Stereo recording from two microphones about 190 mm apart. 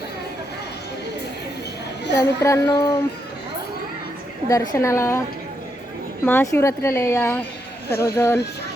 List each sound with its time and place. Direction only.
2.1 s speech: 15° left (ahead or behind)
4.4 s speech: 20° left (ahead or behind)
6.2 s speech: 15° left (ahead or behind)